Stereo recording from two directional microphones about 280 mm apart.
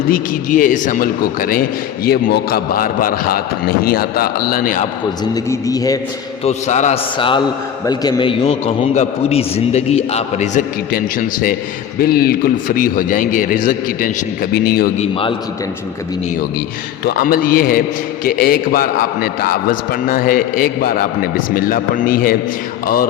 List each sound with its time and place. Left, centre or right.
0.1 s a man's voice: left
5.3 s a man's voice: centre
6.4 s a man's voice: left
17.1 s a man's voice: left